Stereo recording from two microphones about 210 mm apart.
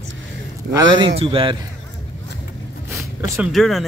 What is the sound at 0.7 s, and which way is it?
Speech, 25° right (ahead or behind).